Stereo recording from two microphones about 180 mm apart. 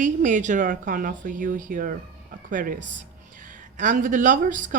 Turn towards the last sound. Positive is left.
turn(degrees=-45)  # may be behind; listen again after turning